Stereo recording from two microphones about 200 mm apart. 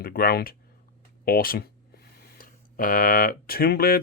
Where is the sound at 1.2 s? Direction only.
45° left (ahead or behind).